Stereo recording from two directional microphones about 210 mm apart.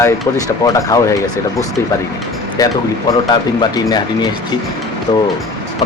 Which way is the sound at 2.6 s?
15° left (ahead or behind).